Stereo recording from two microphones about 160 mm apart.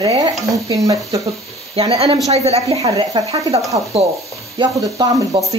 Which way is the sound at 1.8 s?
40° right (ahead or behind).